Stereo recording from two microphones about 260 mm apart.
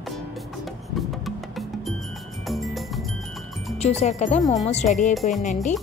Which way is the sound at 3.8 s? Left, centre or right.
Left.